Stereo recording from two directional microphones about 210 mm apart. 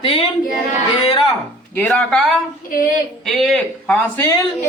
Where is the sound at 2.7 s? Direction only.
40° left (ahead or behind).